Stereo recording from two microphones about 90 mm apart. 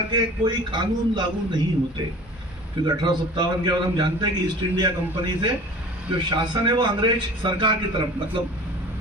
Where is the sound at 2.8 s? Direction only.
55° right (ahead or behind).